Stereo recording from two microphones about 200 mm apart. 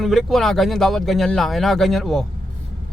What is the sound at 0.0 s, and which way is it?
Speech, centre (ahead or behind).